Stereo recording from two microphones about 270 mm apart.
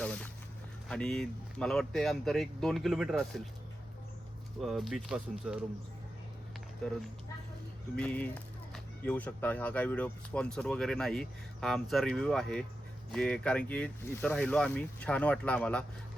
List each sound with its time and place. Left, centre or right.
0.0 s a sound: centre
0.9 s speech: centre
4.6 s speech: centre
6.8 s speech: centre